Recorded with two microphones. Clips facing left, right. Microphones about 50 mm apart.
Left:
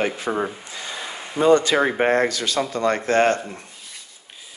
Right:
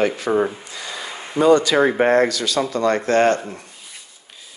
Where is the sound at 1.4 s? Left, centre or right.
Left.